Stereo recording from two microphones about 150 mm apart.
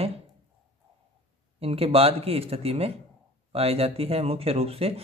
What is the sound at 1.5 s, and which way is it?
Speech, 40° right (ahead or behind).